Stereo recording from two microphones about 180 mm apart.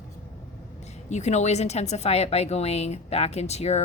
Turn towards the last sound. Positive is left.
turn(degrees=35)  # may be behind; listen again after turning